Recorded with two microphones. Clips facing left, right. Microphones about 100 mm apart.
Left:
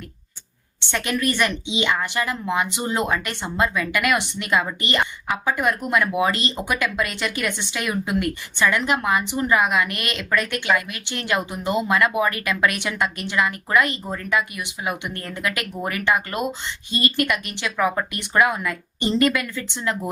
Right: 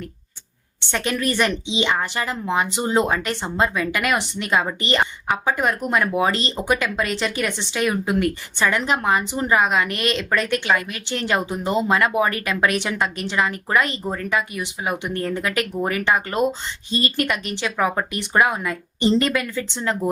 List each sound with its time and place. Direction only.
0.9 s speech: 30° right (ahead or behind)